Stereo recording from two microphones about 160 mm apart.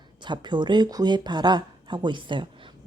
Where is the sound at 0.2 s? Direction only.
30° right (ahead or behind).